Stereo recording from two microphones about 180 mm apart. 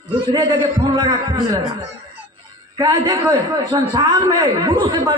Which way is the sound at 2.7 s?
20° right (ahead or behind).